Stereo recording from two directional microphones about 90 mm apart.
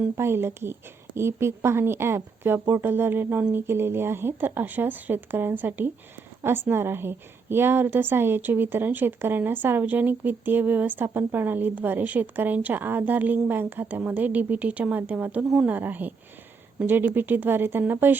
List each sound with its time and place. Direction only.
0.2 s a woman's voice: 25° right (ahead or behind)